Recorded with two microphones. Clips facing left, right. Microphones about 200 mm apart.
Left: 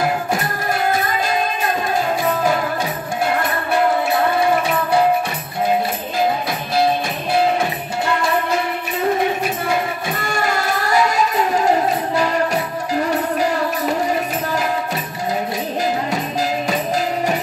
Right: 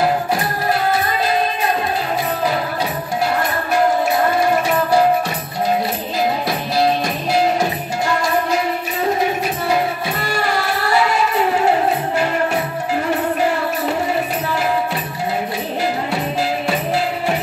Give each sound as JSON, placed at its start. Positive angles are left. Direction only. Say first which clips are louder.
{"t": 10.2, "sound": "music", "louder": "even", "side_deg": 45}